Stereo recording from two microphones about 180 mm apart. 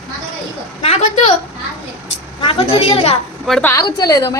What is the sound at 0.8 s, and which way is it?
Speech, 35° left (ahead or behind).